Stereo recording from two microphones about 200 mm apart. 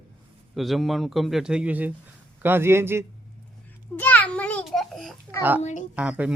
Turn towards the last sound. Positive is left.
turn(degrees=-5)  # may be behind; listen again after turning